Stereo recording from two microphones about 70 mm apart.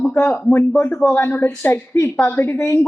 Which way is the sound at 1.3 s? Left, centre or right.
Left.